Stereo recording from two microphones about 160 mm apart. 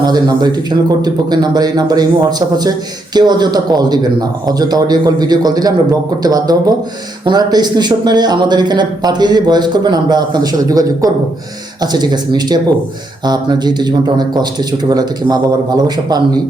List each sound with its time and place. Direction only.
0.0 s speech: 25° right (ahead or behind)
3.2 s speech: 25° right (ahead or behind)